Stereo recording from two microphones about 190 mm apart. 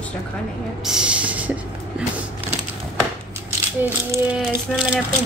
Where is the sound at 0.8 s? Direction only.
5° right (ahead or behind).